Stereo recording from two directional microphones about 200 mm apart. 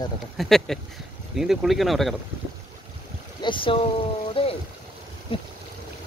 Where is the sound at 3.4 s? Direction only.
25° left (ahead or behind).